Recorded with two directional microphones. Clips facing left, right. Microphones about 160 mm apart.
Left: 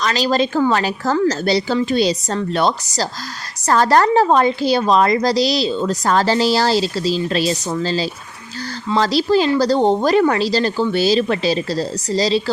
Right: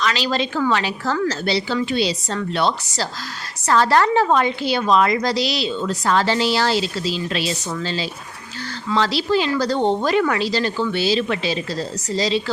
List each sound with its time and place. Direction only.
0.0 s a woman's voice: 40° left (ahead or behind)